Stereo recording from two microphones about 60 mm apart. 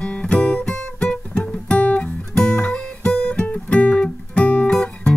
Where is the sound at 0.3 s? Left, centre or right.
Centre.